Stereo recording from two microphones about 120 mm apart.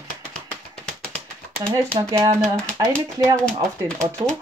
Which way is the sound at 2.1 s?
25° right (ahead or behind).